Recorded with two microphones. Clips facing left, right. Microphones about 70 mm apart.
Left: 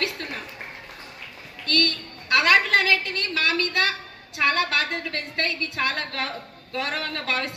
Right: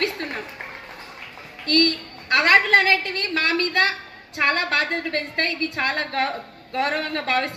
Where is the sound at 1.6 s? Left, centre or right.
Right.